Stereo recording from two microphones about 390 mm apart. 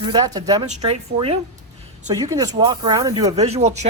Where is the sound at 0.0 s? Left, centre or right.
Centre.